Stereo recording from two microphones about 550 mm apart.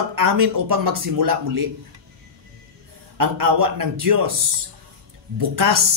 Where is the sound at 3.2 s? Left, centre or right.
Right.